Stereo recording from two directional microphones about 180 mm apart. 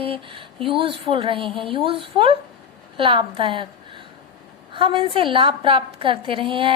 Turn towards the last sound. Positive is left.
turn(degrees=-30)  # may be behind; listen again after turning